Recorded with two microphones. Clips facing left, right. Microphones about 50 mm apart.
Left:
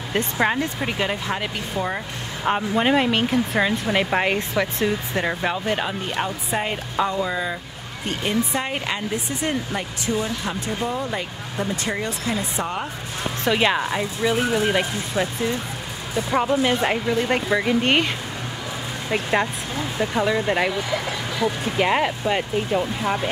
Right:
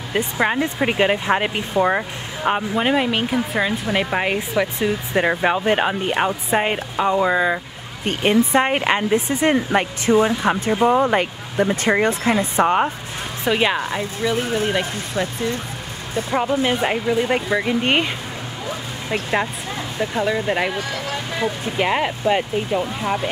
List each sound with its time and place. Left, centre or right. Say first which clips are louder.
0.1 s speech: right 1 dB; centre
0.6 s speech: right 5 dB; right
2.4 s speech: right 1 dB; centre
5.1 s speech: right 5 dB; right
9.7 s speech: right 8 dB; right
10.9 s speech: right 10 dB; right
11.5 s speech: right 8 dB; right
13.4 s speech: right 1 dB; centre
14.3 s speech: left 1 dB; centre
14.7 s speech: even; centre
16.3 s speech: even; centre
20.0 s speech: even; centre
21.7 s speech: even; centre